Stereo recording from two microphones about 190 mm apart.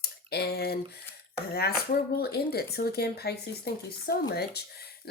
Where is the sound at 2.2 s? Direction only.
55° left (ahead or behind).